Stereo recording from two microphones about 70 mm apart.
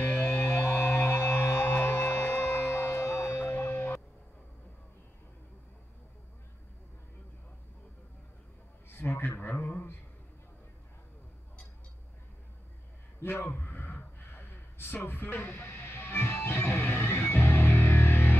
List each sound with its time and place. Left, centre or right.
0.0 s music: left
3.1 s music: left
8.8 s a sound: left
9.5 s speech: left
13.2 s a sound: left
15.0 s speech: left
15.5 s music: left